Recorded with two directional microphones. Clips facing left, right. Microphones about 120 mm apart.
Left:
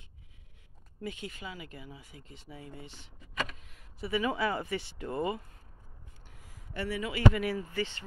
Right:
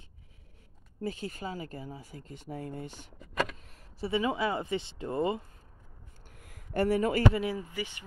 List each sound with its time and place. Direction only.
1.0 s speech: 35° right (ahead or behind)
3.7 s speech: 30° right (ahead or behind)
6.4 s speech: 50° right (ahead or behind)
7.3 s speech: 20° right (ahead or behind)